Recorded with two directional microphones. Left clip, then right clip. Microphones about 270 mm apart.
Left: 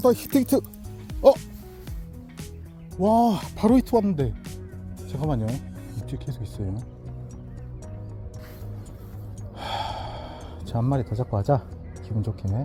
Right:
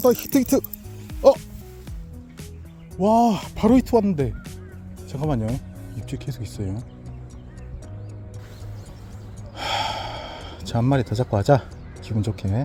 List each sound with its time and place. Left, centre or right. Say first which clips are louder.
0.0 s speech: right 2 dB; centre
1.0 s music: right 1 dB; centre
3.0 s speech: right 2 dB; centre
5.5 s music: right 2 dB; centre
6.1 s speech: right 5 dB; centre
9.6 s gasp: right 5 dB; centre
12.0 s speech: right 5 dB; right